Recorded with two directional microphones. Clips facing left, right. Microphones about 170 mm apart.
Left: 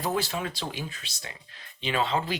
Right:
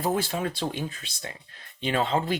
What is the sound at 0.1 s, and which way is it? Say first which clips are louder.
Speech: right 2 dB; 50° right (ahead or behind).